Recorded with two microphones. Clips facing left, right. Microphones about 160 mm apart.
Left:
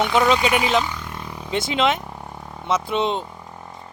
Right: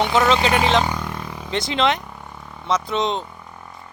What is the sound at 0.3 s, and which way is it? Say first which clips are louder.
Speech: right 2 dB; 30° right (ahead or behind).